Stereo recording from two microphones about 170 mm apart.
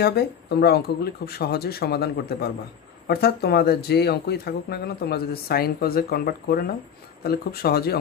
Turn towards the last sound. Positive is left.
turn(degrees=65)  # may be behind; listen again after turning